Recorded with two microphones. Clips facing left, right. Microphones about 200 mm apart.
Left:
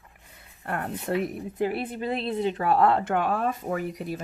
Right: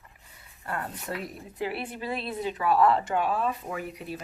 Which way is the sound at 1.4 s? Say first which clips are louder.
Left 5 dB; 50° left (ahead or behind).